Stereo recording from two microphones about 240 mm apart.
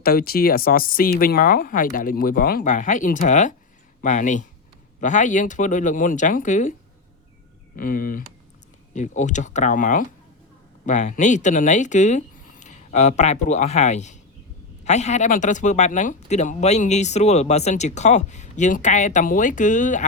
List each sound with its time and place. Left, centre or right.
0.0 s speech: left
7.8 s speech: left